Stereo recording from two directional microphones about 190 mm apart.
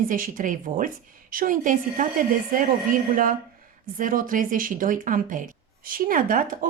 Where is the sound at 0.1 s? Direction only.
45° right (ahead or behind).